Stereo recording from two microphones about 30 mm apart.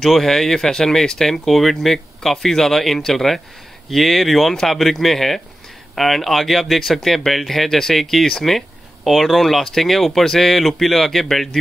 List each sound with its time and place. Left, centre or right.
0.2 s speech: centre
9.0 s speech: centre